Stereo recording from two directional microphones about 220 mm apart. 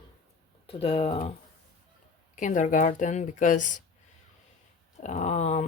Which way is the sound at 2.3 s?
35° left (ahead or behind).